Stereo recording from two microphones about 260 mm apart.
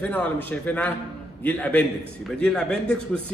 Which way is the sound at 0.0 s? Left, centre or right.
Centre.